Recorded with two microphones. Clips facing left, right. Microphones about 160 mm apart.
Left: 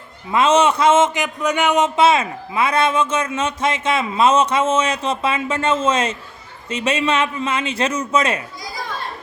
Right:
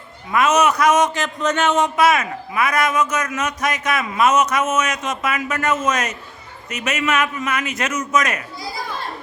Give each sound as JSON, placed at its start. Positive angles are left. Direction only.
{"t": 0.3, "sound": "a man's voice", "side_deg": 25}